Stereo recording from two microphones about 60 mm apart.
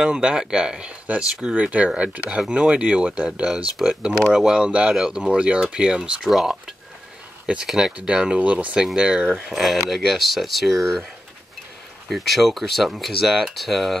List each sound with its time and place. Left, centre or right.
0.0 s speech: centre
3.8 s speech: centre
6.2 s speech: centre
8.1 s speech: centre
8.7 s speech: centre
9.5 s speech: centre
12.1 s speech: centre